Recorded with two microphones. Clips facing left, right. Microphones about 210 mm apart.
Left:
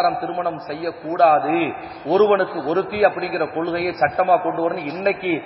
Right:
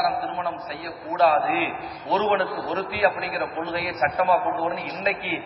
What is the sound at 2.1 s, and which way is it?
A man's voice, 45° left (ahead or behind).